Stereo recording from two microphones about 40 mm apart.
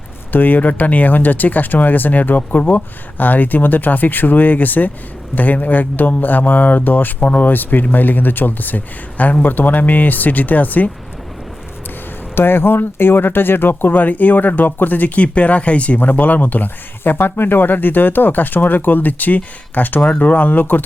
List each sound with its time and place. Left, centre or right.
0.3 s speech: left
12.3 s speech: left
16.0 s speech: left
17.0 s speech: left